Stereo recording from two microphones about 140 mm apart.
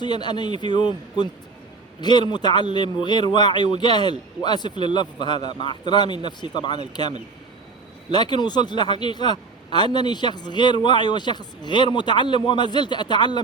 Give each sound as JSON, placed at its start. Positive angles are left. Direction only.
{"t": 0.0, "sound": "a man's voice", "side_deg": 30}
{"t": 8.1, "sound": "a man's voice", "side_deg": 30}